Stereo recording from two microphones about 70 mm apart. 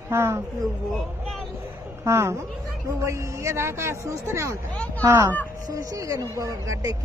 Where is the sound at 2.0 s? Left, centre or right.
Right.